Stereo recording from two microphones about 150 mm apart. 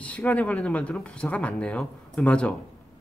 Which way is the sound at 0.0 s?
10° left (ahead or behind).